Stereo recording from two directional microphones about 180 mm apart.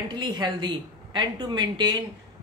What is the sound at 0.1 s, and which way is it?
Speech, 25° right (ahead or behind).